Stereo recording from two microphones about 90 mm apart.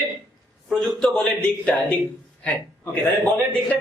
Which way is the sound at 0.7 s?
10° left (ahead or behind).